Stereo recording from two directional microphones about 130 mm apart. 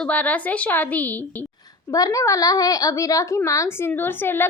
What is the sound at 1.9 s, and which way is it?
Speech, 25° left (ahead or behind).